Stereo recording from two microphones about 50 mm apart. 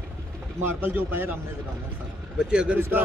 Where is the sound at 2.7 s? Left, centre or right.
Right.